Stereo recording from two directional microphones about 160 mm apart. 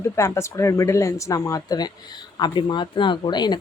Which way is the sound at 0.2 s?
15° left (ahead or behind).